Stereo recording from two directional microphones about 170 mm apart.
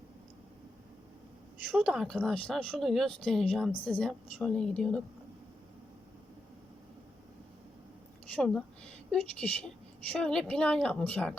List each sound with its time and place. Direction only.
1.8 s a woman's voice: centre (ahead or behind)
8.4 s a woman's voice: 5° left (ahead or behind)